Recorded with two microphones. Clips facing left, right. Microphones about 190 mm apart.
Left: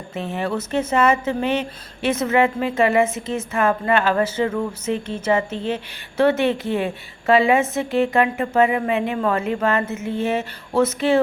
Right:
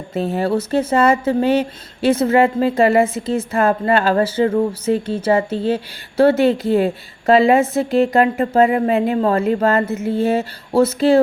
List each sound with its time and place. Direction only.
0.1 s speech: 35° right (ahead or behind)